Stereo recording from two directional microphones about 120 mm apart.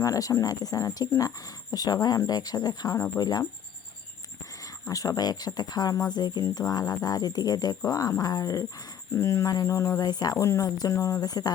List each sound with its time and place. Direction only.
0.0 s speech: 30° left (ahead or behind)
4.6 s speech: 30° left (ahead or behind)
10.0 s speech: 35° left (ahead or behind)